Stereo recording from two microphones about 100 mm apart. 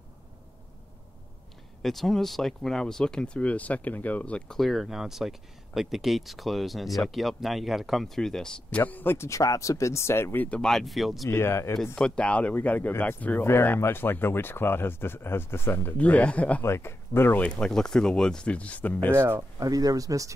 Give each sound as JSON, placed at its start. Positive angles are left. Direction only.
{"t": 1.8, "sound": "speech", "side_deg": 0}
{"t": 4.6, "sound": "speech", "side_deg": 0}
{"t": 10.6, "sound": "speech", "side_deg": 5}
{"t": 11.2, "sound": "speech", "side_deg": 25}
{"t": 11.8, "sound": "speech", "side_deg": 10}
{"t": 16.6, "sound": "speech", "side_deg": 25}
{"t": 17.6, "sound": "speech", "side_deg": 5}
{"t": 19.1, "sound": "speech", "side_deg": -25}
{"t": 19.7, "sound": "speech", "side_deg": -40}